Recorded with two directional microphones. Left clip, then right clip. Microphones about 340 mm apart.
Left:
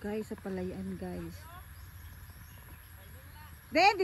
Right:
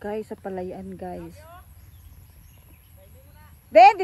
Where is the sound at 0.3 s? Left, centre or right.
Right.